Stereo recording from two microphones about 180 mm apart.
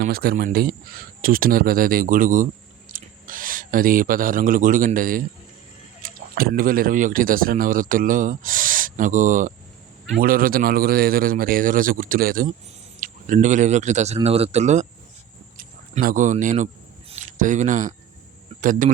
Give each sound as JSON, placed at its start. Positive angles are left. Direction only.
{"t": 0.0, "sound": "speech", "side_deg": -60}
{"t": 15.5, "sound": "speech", "side_deg": -50}
{"t": 17.1, "sound": "a sound", "side_deg": -45}
{"t": 18.6, "sound": "speech", "side_deg": -45}